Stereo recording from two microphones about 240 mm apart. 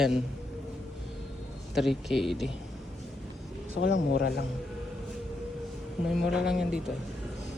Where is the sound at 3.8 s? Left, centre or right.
Left.